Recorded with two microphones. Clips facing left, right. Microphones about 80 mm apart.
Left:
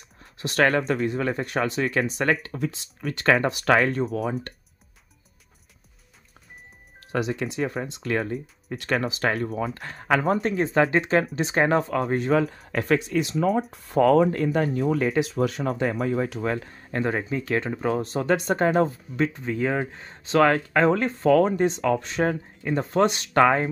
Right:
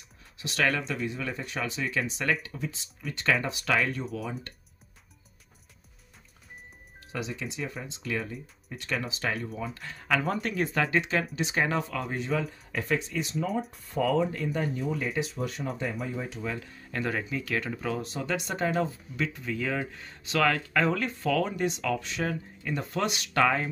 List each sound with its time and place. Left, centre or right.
0.2 s speech: left
7.0 s speech: left
13.7 s speech: left
16.5 s speech: left